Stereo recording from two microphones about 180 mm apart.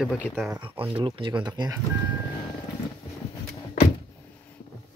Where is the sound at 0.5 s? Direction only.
30° right (ahead or behind).